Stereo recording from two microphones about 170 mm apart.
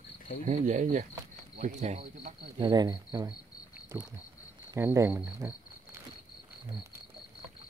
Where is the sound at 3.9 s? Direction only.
15° right (ahead or behind).